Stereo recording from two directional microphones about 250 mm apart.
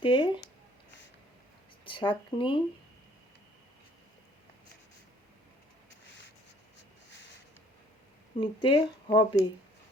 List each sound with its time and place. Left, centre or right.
0.0 s a sound: centre
1.8 s speech: centre
8.4 s speech: centre